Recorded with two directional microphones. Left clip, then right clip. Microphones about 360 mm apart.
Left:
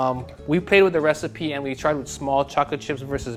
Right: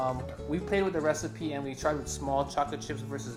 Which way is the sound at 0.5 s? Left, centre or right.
Left.